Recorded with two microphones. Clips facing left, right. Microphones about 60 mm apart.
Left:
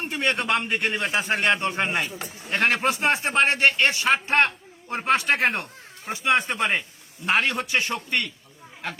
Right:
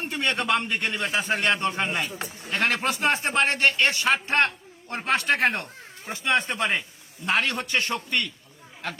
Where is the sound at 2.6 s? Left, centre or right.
Left.